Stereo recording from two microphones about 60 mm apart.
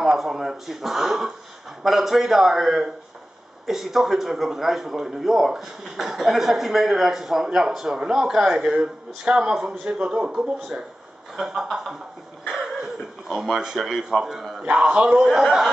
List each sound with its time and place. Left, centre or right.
0.0 s a man's voice: centre
14.6 s speech: right
15.0 s speech: centre